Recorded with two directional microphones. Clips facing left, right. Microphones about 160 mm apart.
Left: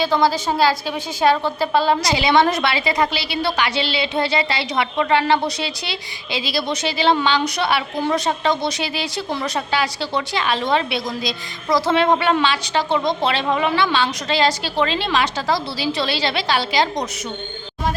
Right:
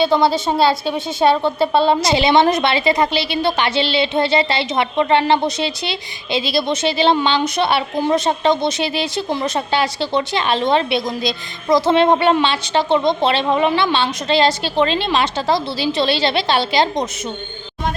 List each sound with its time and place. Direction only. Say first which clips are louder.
0.0 s a woman's voice: right 3 dB; 25° right (ahead or behind)